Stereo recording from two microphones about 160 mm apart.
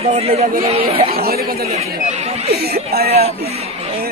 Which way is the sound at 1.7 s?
40° right (ahead or behind).